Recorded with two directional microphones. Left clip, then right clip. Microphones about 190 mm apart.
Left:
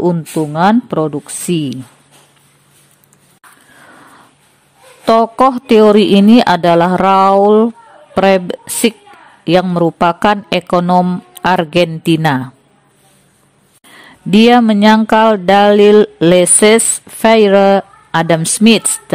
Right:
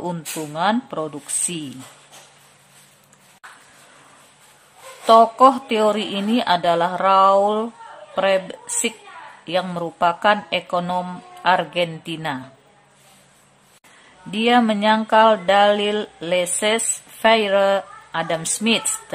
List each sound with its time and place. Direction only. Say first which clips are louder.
0.0 s speech: left 13 dB; 30° left (ahead or behind)
5.0 s speech: left 2 dB; 45° left (ahead or behind)
14.3 s speech: left 9 dB; 45° left (ahead or behind)